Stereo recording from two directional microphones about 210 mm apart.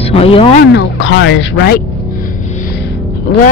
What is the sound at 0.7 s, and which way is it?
Speech, 60° left (ahead or behind).